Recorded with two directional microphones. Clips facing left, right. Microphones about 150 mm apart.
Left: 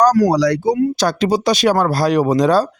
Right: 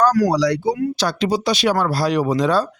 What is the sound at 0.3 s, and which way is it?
Speech, 45° left (ahead or behind).